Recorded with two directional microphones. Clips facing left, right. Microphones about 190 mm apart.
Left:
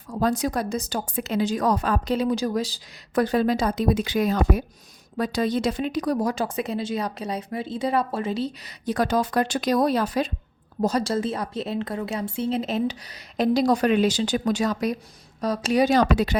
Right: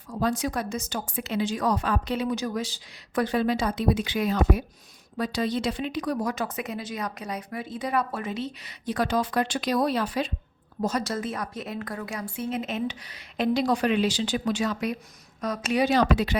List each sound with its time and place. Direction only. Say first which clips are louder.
0.1 s a woman's voice: left 3 dB; 40° left (ahead or behind)